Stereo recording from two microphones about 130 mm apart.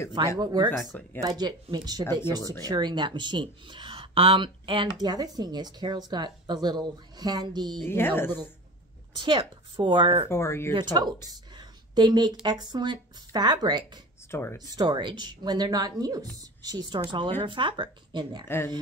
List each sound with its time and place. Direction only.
0.4 s a woman's voice: 30° right (ahead or behind)
7.8 s speech: 15° left (ahead or behind)
9.1 s a woman's voice: 40° right (ahead or behind)
10.3 s speech: 20° left (ahead or behind)
10.7 s a woman's voice: 35° right (ahead or behind)
14.3 s speech: 20° left (ahead or behind)
14.6 s a woman's voice: 30° right (ahead or behind)